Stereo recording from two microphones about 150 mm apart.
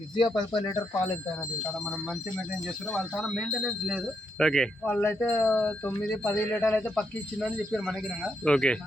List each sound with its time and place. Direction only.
0.2 s speech: 30° left (ahead or behind)
3.2 s speech: 5° left (ahead or behind)